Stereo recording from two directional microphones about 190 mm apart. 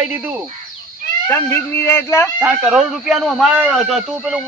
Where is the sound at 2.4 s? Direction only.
5° right (ahead or behind).